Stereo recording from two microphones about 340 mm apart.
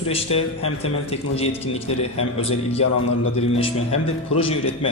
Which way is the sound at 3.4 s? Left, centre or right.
Centre.